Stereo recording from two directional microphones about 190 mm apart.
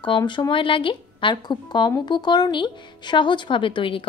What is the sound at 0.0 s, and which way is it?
Speech, 25° left (ahead or behind).